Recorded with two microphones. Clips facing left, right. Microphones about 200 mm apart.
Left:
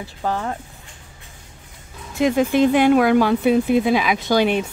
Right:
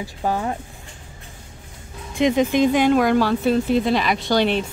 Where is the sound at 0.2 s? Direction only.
15° right (ahead or behind).